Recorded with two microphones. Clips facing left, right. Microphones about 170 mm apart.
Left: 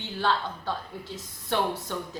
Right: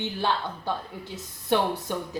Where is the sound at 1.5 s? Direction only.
15° right (ahead or behind).